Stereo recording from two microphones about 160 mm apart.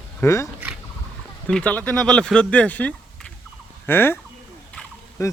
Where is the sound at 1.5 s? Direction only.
5° left (ahead or behind).